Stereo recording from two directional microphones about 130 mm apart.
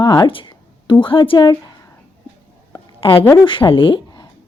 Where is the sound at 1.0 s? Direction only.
40° left (ahead or behind).